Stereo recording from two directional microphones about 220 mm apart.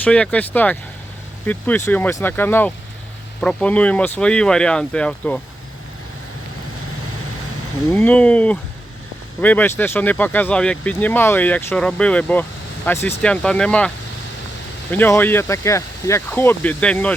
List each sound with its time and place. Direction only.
0.0 s speech: 5° left (ahead or behind)
7.9 s speech: 10° left (ahead or behind)